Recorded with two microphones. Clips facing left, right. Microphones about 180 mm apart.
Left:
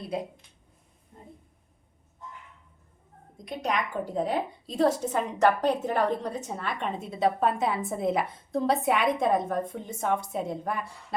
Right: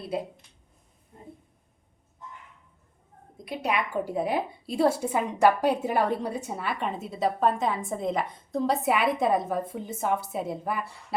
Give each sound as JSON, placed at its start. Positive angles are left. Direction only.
{"t": 3.3, "sound": "a woman's voice", "side_deg": -5}